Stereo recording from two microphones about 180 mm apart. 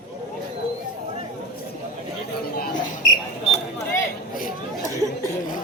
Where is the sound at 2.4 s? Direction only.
55° left (ahead or behind).